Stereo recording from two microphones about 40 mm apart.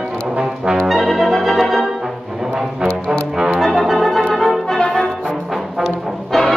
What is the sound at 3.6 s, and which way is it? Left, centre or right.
Organ, centre.